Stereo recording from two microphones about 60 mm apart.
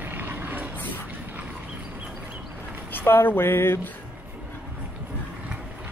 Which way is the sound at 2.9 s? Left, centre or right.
Left.